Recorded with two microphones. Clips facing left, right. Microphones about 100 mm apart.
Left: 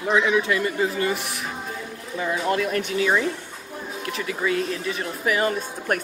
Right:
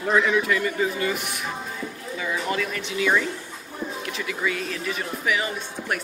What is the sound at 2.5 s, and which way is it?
Speech, 45° left (ahead or behind).